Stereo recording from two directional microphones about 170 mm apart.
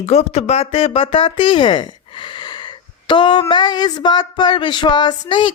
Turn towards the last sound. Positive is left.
turn(degrees=30)  # may be behind; listen again after turning